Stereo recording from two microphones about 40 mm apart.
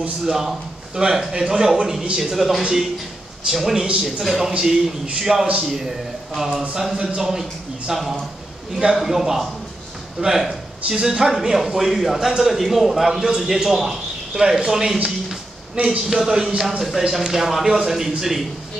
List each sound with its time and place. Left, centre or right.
0.2 s a man's voice: centre
15.0 s a sound: centre
16.1 s speech: centre